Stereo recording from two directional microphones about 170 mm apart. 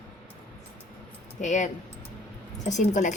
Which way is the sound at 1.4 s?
45° left (ahead or behind).